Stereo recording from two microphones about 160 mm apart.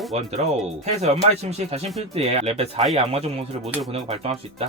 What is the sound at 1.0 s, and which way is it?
Speech, 40° right (ahead or behind).